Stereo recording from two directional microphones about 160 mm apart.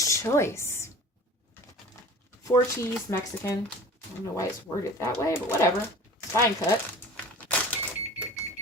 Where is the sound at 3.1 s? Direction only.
15° left (ahead or behind).